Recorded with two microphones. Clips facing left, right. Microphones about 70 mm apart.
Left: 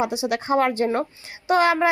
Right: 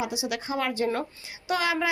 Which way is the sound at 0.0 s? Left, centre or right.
Left.